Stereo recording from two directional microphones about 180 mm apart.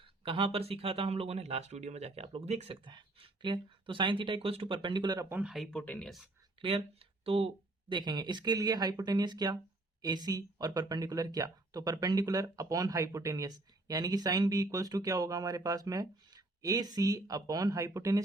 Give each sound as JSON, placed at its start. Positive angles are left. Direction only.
{"t": 0.3, "sound": "speech", "side_deg": -30}
{"t": 5.3, "sound": "speech", "side_deg": -5}
{"t": 6.6, "sound": "speech", "side_deg": -30}